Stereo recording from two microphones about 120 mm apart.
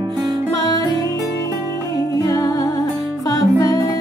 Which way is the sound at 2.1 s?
30° left (ahead or behind).